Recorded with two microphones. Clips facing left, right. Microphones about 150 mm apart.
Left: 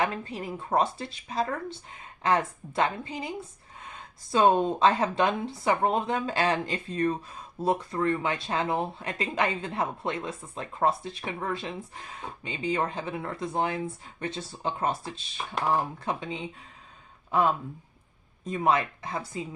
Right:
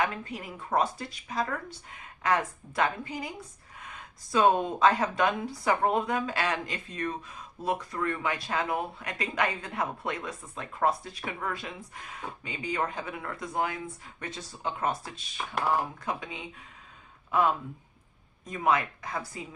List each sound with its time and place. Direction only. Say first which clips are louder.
0.0 s speech: left 2 dB; 30° left (ahead or behind)
18.4 s speech: left 2 dB; 30° left (ahead or behind)